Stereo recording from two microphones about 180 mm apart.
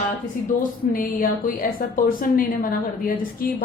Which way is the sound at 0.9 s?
50° left (ahead or behind).